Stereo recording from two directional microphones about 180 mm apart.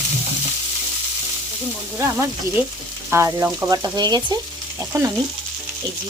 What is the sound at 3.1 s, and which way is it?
Frying, 15° right (ahead or behind).